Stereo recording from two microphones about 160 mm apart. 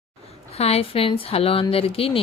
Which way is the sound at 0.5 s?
40° left (ahead or behind).